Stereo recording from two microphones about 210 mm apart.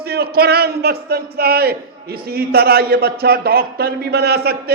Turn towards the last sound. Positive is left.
turn(degrees=-50)  # may be behind; listen again after turning